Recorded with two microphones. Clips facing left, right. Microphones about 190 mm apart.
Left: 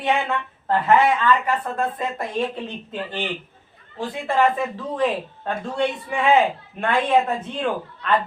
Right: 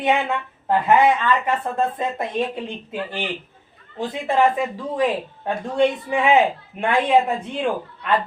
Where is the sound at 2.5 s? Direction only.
10° right (ahead or behind).